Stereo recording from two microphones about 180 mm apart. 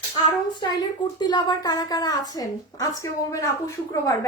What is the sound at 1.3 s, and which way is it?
Speech, 20° left (ahead or behind).